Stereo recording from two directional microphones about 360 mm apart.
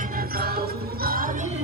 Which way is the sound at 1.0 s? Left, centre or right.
Right.